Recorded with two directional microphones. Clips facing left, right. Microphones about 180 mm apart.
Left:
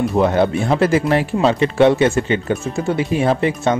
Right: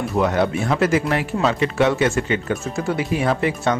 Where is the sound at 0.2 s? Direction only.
25° left (ahead or behind).